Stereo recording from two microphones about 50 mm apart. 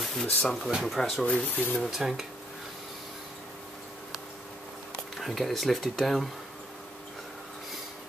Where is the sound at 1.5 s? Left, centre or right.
Left.